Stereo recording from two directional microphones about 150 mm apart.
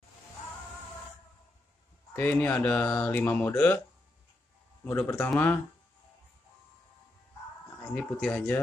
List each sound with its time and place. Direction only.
2.1 s speech: 10° left (ahead or behind)
4.8 s speech: 15° left (ahead or behind)
7.9 s speech: 10° left (ahead or behind)